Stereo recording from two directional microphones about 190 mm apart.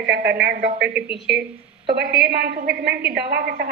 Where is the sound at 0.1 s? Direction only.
60° right (ahead or behind).